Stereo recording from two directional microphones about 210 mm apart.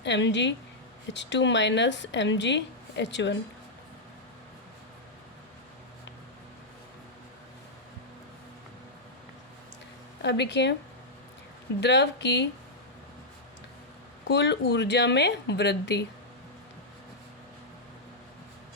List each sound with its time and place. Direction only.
0.0 s speech: 60° left (ahead or behind)
10.2 s speech: 55° left (ahead or behind)
11.8 s speech: 55° left (ahead or behind)
14.3 s speech: 55° left (ahead or behind)